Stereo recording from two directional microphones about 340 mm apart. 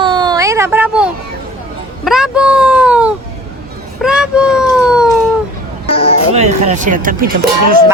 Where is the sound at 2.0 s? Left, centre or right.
Centre.